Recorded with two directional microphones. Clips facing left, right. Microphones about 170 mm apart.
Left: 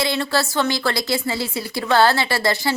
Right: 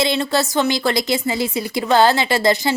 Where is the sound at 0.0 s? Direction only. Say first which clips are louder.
Right 3 dB; 20° right (ahead or behind).